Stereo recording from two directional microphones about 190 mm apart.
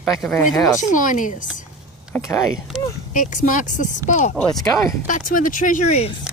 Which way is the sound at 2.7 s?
Centre (ahead or behind).